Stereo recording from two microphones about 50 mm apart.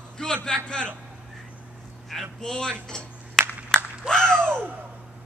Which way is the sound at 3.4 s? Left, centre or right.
Centre.